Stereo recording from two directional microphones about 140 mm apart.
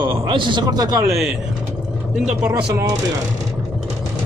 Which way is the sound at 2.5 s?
25° right (ahead or behind).